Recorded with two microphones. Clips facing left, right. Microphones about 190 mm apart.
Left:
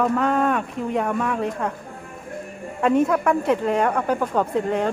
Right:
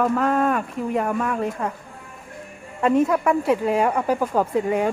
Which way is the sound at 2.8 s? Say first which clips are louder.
Even; centre (ahead or behind).